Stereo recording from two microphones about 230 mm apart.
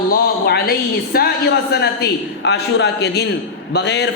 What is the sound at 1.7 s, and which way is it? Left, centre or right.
A woman's voice, left.